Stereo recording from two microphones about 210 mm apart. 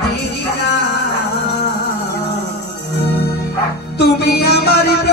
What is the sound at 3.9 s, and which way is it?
Music, 50° left (ahead or behind).